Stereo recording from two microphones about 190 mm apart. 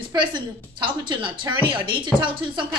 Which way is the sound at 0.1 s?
25° right (ahead or behind).